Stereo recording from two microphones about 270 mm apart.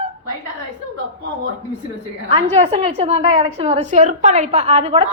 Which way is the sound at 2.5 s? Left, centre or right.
Right.